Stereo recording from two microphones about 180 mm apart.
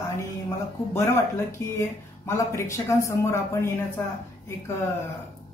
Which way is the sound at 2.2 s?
15° left (ahead or behind).